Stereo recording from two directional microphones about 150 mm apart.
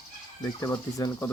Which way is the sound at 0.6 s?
25° left (ahead or behind).